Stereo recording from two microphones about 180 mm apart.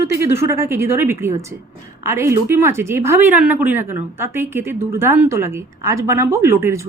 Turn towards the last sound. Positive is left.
turn(degrees=-15)  # may be behind; listen again after turning